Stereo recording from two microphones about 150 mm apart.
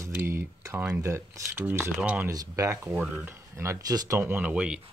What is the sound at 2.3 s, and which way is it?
Speech, 25° right (ahead or behind).